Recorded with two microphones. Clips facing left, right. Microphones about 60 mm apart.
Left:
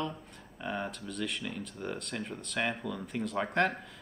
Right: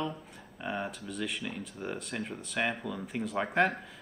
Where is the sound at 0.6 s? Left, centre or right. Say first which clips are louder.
Right 1 dB; centre.